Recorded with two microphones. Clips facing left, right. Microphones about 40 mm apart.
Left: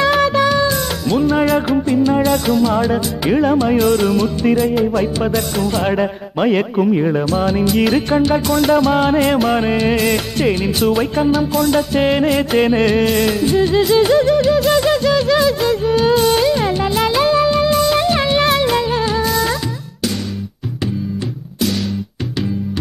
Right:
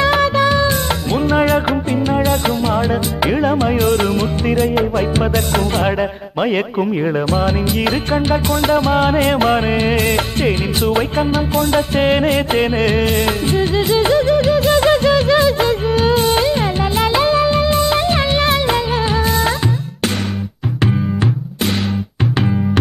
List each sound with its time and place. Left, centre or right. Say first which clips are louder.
2.0 s music: left 2 dB; centre
2.4 s music: left 2 dB; right
2.9 s a man's voice: even; centre
5.9 s a man's voice: left 1 dB; centre
11.2 s music: left 2 dB; right
11.7 s a man's voice: right 3 dB; centre
14.9 s a sound: right 2 dB; centre
16.4 s music: left 1 dB; centre
17.8 s music: left 1 dB; right
18.1 s music: left 1 dB; centre